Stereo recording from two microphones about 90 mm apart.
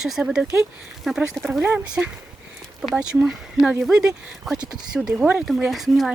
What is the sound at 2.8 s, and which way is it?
A woman's voice, centre (ahead or behind).